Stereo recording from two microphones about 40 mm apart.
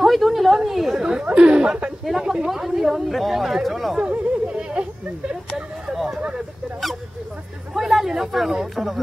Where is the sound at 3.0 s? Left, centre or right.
Centre.